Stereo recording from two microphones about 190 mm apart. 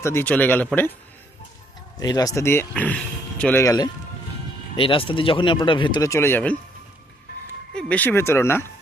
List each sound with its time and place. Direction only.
0.0 s speech: 10° left (ahead or behind)
2.0 s speech: 20° left (ahead or behind)
4.8 s speech: 25° left (ahead or behind); by 6.6 s 10° left (ahead or behind)
7.8 s speech: 5° left (ahead or behind)